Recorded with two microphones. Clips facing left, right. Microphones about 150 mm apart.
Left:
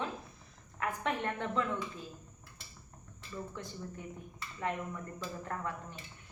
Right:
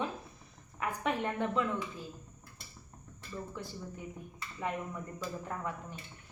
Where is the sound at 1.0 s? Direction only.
10° right (ahead or behind).